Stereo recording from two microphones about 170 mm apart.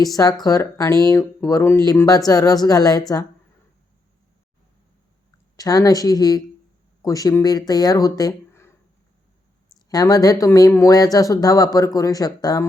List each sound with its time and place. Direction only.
0.0 s speech: 20° left (ahead or behind)
5.5 s speech: 20° left (ahead or behind)
9.7 s speech: 20° left (ahead or behind)